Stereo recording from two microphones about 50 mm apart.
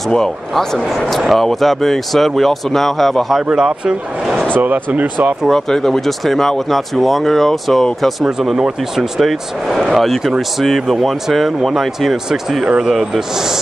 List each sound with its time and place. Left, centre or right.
0.1 s speech: centre
1.2 s speech: centre
3.4 s a man's voice: centre
4.6 s speech: right
5.5 s speech: centre
8.5 s speech: centre
9.2 s speech: centre